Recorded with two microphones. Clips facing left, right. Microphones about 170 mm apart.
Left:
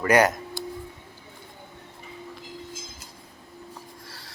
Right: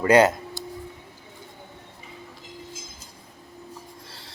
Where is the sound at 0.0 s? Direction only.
25° right (ahead or behind).